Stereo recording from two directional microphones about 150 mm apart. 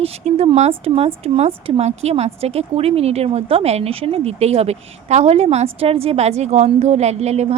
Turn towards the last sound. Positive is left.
turn(degrees=-45)  # may be behind; listen again after turning